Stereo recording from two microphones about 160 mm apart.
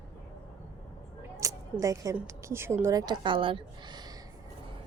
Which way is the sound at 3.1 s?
30° right (ahead or behind).